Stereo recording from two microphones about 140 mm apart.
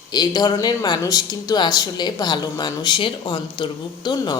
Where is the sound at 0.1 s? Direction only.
30° left (ahead or behind).